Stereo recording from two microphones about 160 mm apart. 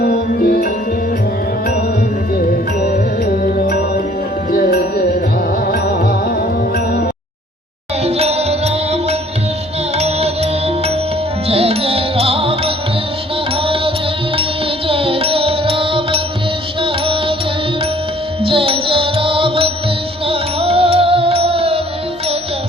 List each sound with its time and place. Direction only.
0.0 s music: 70° left (ahead or behind)
3.4 s music: 60° left (ahead or behind)
4.5 s music: 75° left (ahead or behind)
8.0 s music: 40° right (ahead or behind)
14.8 s music: 35° right (ahead or behind)
18.4 s music: 35° right (ahead or behind)